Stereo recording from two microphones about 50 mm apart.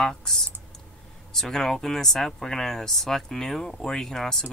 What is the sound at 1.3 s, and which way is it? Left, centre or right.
Speech, centre.